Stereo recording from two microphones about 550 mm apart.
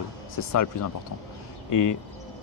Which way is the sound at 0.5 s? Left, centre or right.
Left.